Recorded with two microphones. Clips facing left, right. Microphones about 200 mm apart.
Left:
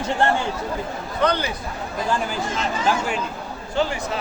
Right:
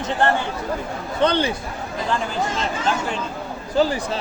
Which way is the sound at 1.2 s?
30° right (ahead or behind).